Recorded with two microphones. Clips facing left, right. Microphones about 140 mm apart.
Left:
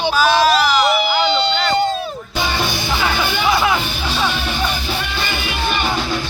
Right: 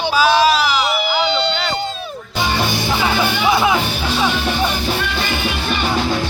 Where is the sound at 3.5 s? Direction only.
15° right (ahead or behind).